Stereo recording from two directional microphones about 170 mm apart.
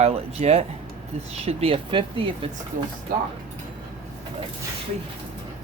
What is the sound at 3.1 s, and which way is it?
Speech, 60° right (ahead or behind).